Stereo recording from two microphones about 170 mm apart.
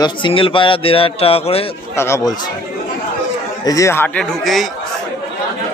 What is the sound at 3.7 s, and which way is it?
A man's voice, 15° left (ahead or behind).